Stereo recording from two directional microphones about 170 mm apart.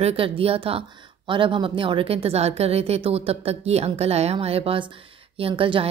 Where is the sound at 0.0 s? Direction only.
35° right (ahead or behind).